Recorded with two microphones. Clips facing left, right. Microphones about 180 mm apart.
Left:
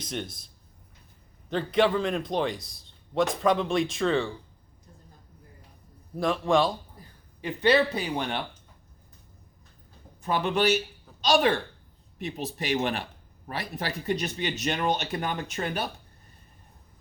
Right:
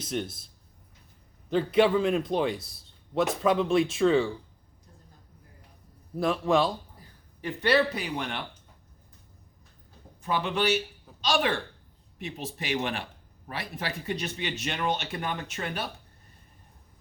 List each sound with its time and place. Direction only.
0.0 s a man's voice: 5° right (ahead or behind)
6.1 s a man's voice: 5° right (ahead or behind)
7.4 s speech: 20° left (ahead or behind)
10.2 s speech: 45° left (ahead or behind)